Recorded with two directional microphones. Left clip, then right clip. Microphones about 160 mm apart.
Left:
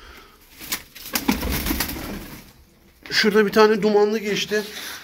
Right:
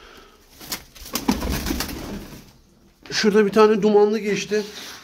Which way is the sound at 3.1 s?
25° right (ahead or behind).